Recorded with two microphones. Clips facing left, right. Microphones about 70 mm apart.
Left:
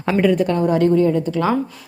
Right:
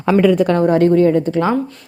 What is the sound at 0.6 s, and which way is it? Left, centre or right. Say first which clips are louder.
Speech: right 3 dB; right.